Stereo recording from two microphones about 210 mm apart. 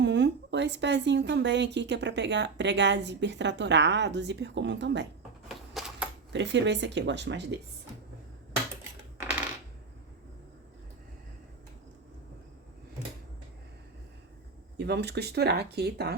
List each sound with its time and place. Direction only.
0.0 s a woman's voice: 55° right (ahead or behind)
5.5 s a sound: centre (ahead or behind)
6.3 s a woman's voice: 55° right (ahead or behind)
14.8 s speech: 55° right (ahead or behind)